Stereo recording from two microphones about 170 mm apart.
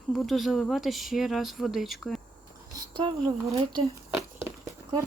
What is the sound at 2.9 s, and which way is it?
Speech, 25° right (ahead or behind).